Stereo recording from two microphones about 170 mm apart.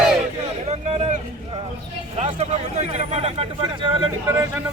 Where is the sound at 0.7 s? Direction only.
40° right (ahead or behind).